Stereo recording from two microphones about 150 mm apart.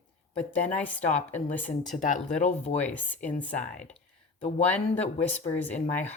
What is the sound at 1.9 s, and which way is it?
Speech, 55° left (ahead or behind).